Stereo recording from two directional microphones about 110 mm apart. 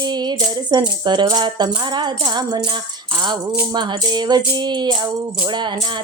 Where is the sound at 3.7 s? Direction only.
40° right (ahead or behind).